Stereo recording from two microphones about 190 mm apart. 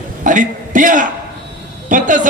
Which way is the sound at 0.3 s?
40° right (ahead or behind).